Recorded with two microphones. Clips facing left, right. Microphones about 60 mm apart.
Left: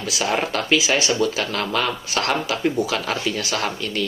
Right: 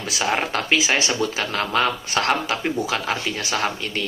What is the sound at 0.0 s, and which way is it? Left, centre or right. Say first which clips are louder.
Speech: even; right.